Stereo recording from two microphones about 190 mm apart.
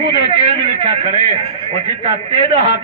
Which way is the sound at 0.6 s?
30° right (ahead or behind).